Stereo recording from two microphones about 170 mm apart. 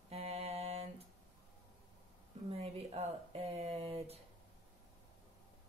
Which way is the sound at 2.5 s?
35° right (ahead or behind).